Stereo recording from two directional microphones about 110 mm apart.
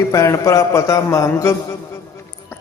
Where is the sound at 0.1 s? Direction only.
30° left (ahead or behind).